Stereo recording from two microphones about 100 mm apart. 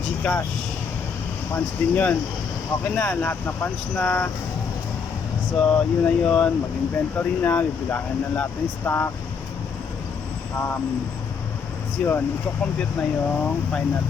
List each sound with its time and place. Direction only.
0.2 s speech: 10° left (ahead or behind)
1.5 s speech: 20° left (ahead or behind)
5.5 s speech: 15° left (ahead or behind)
12.0 s speech: 10° left (ahead or behind)